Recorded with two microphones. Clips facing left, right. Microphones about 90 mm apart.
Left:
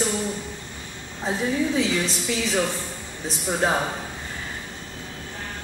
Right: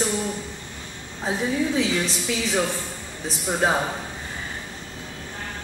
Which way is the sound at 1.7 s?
Centre (ahead or behind).